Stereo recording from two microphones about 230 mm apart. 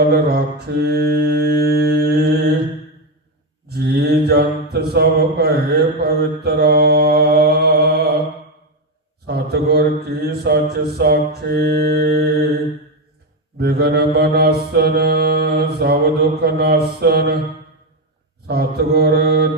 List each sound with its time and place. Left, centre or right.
0.3 s mantra: right
3.7 s mantra: right
9.2 s a sound: right
13.6 s mantra: right
18.4 s mantra: right